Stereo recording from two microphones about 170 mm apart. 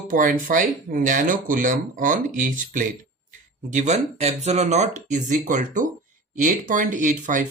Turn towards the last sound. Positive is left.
turn(degrees=-50)  # may be behind; listen again after turning